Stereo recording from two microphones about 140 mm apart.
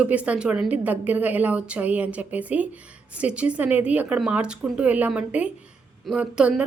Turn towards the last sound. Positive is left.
turn(degrees=-5)  # may be behind; listen again after turning